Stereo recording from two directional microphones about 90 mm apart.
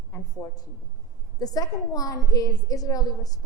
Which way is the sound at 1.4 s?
40° left (ahead or behind).